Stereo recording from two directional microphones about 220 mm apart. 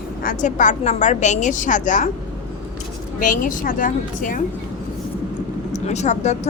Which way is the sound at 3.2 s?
35° left (ahead or behind).